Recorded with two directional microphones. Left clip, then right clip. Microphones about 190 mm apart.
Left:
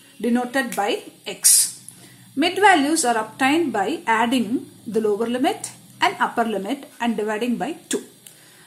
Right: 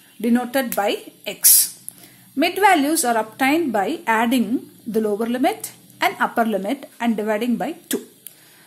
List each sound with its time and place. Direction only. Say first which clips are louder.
0.2 s speech: right 1 dB; 40° right (ahead or behind)